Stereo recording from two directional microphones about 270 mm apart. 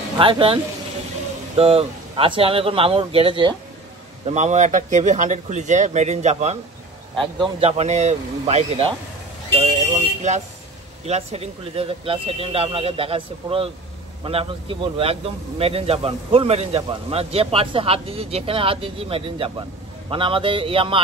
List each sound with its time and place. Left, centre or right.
0.2 s speech: centre
1.6 s speech: right
9.6 s vehicle: right
11.1 s speech: right